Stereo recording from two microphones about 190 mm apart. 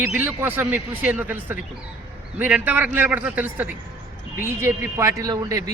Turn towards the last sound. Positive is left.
turn(degrees=-15)  # may be behind; listen again after turning